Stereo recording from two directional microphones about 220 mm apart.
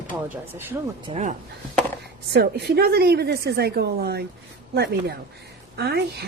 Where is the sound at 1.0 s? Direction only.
30° right (ahead or behind).